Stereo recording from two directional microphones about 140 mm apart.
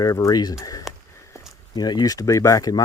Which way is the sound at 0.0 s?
25° left (ahead or behind).